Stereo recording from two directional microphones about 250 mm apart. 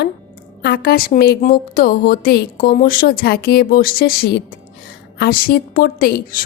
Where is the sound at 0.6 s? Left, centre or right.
Left.